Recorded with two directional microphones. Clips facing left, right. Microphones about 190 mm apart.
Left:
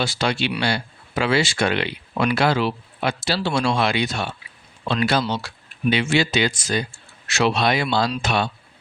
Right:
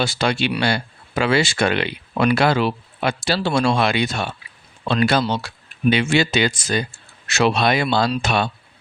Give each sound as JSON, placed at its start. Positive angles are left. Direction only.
{"t": 0.0, "sound": "speech", "side_deg": -50}